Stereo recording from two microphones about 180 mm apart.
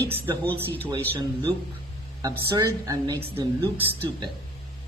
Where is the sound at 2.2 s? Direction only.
20° right (ahead or behind).